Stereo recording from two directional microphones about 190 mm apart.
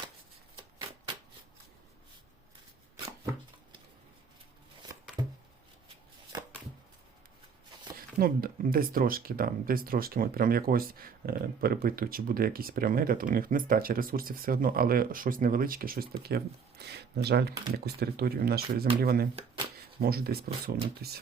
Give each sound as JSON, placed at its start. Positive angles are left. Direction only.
{"t": 0.5, "sound": "shuffling cards", "side_deg": -25}
{"t": 8.2, "sound": "speech", "side_deg": -50}